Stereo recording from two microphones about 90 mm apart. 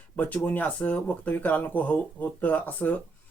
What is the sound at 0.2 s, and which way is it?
Speech, 20° left (ahead or behind).